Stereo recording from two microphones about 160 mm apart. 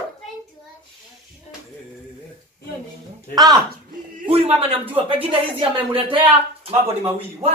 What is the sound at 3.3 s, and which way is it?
Speech, 25° right (ahead or behind).